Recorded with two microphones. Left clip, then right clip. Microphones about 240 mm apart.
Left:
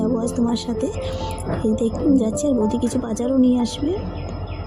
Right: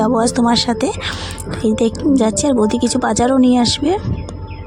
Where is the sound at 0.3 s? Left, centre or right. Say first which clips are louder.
Right 8 dB; right.